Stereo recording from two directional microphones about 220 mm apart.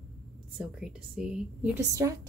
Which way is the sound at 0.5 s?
5° right (ahead or behind).